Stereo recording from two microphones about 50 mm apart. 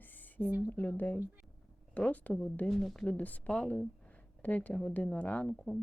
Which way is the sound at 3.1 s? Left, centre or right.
Left.